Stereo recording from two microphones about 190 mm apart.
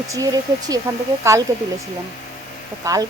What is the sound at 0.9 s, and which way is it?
Speech, 15° right (ahead or behind).